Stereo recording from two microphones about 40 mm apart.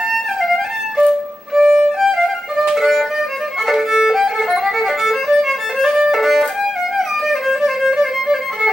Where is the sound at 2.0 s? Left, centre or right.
Centre.